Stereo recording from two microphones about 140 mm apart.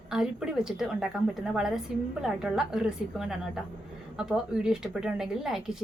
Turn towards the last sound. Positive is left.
turn(degrees=-5)  # may be behind; listen again after turning